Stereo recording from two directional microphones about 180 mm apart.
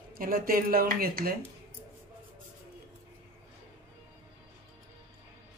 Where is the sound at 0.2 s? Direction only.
55° right (ahead or behind).